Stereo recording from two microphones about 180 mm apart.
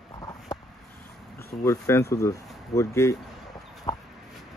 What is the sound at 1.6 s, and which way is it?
Speech, 15° left (ahead or behind).